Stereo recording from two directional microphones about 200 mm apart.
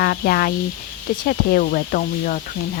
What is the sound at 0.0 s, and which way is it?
Speech, 50° left (ahead or behind).